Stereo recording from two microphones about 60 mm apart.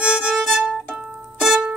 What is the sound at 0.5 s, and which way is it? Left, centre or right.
Music, centre.